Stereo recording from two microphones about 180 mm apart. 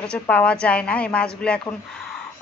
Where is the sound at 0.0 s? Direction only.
5° left (ahead or behind).